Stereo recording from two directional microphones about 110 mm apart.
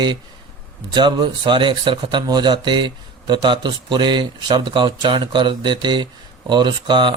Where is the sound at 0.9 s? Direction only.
45° right (ahead or behind).